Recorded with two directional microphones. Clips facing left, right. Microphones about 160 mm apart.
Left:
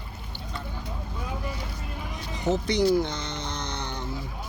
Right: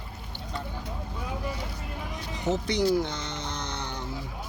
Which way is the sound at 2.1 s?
5° right (ahead or behind).